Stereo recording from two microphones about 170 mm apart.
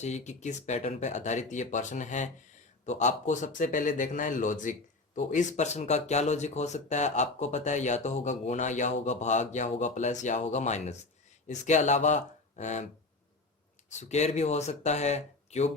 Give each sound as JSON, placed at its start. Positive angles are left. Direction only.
{"t": 0.0, "sound": "speech", "side_deg": 45}
{"t": 14.0, "sound": "speech", "side_deg": 40}